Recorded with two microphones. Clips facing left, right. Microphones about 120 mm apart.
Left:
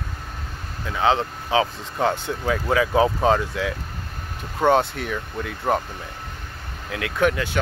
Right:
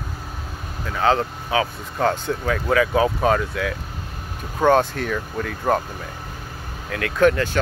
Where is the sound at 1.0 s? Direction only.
20° left (ahead or behind).